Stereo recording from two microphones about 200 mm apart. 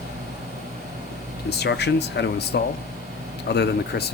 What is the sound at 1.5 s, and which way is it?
Speech, 55° left (ahead or behind).